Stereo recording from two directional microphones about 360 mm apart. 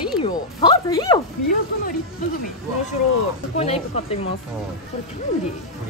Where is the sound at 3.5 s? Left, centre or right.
Centre.